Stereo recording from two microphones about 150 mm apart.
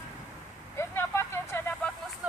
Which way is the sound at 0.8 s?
15° left (ahead or behind).